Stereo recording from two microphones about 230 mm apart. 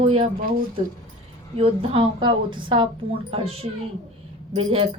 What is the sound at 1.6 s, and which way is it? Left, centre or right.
Speech, right.